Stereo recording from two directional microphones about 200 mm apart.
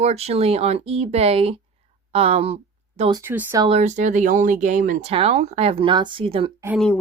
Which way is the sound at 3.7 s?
35° right (ahead or behind).